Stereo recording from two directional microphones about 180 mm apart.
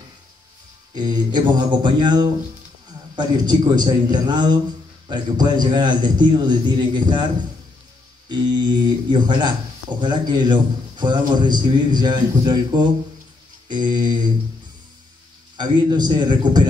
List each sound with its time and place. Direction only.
0.9 s speech: 25° right (ahead or behind)
8.3 s speech: 25° right (ahead or behind)
15.5 s speech: 25° right (ahead or behind)